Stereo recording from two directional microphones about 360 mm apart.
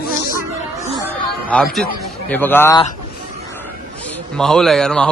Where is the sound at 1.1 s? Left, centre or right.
Centre.